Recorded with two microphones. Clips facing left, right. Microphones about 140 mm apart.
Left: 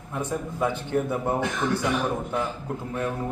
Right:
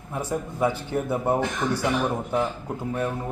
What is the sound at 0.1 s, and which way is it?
A man's voice, 10° right (ahead or behind).